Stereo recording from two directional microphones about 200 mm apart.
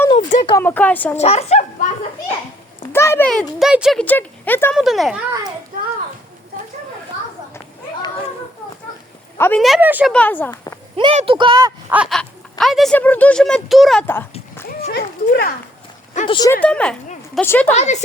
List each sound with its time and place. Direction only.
0.2 s a sound: 40° left (ahead or behind)
0.6 s speech: 10° left (ahead or behind)
1.1 s speech: 30° left (ahead or behind)
2.9 s speech: 10° left (ahead or behind); by 4.0 s 5° right (ahead or behind)
4.0 s speech: 10° left (ahead or behind)
5.7 s a child's voice: 45° right (ahead or behind)
9.4 s speech: 5° left (ahead or behind)
10.1 s speech: 5° left (ahead or behind)
10.9 s speech: 30° right (ahead or behind)
11.9 s speech: 5° right (ahead or behind)
14.8 s speech: 55° left (ahead or behind)
16.2 s speech: 25° left (ahead or behind)
16.5 s speech: 5° left (ahead or behind)
17.7 s speech: 35° left (ahead or behind)